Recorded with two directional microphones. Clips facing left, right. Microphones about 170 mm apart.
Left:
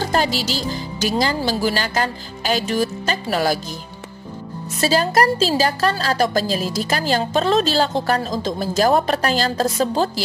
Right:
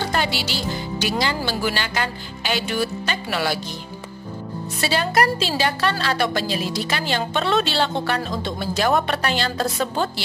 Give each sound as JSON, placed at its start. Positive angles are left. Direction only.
{"t": 0.0, "sound": "a woman's voice", "side_deg": 35}
{"t": 4.7, "sound": "a woman's voice", "side_deg": 35}